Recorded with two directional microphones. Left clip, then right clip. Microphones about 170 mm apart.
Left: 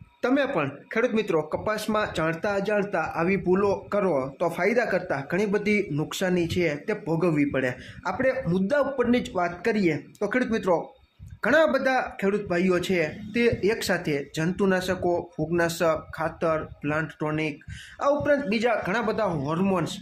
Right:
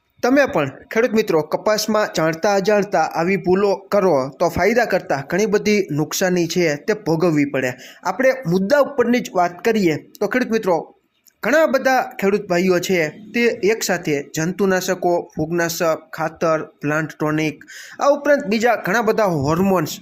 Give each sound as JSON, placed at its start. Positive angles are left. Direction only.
{"t": 0.2, "sound": "speech", "side_deg": -30}